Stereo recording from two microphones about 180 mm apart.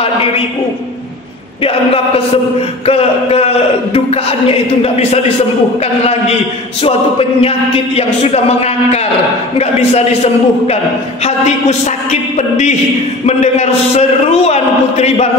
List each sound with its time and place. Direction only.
2.9 s music: 35° left (ahead or behind)
6.8 s music: 30° left (ahead or behind)
12.1 s music: 40° left (ahead or behind)